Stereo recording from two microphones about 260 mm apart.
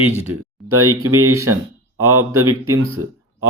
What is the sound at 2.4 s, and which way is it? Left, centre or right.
Speech, right.